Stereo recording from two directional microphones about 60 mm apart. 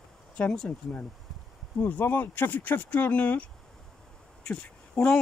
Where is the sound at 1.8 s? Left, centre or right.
Left.